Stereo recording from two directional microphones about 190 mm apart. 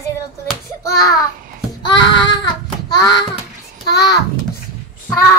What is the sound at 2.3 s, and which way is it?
Child singing, 20° left (ahead or behind).